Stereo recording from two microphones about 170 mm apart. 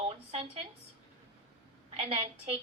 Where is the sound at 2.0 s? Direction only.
35° right (ahead or behind).